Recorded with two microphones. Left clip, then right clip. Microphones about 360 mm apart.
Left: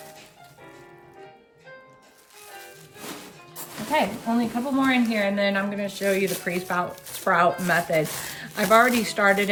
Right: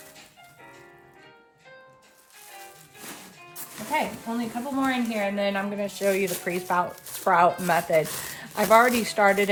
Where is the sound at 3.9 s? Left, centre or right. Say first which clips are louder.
Left 4 dB; centre.